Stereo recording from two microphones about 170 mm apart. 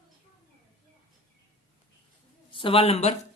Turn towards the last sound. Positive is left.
turn(degrees=40)  # may be behind; listen again after turning